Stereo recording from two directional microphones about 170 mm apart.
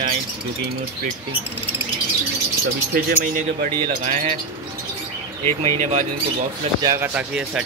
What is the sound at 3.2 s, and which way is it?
Wind chime, 60° right (ahead or behind).